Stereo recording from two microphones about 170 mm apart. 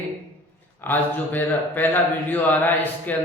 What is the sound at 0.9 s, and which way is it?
Speech, 10° left (ahead or behind).